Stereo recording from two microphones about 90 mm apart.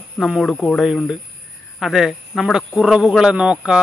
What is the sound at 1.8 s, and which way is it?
Speech, 5° right (ahead or behind).